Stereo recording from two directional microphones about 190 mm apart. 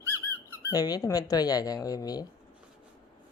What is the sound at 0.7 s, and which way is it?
Speech, 20° left (ahead or behind).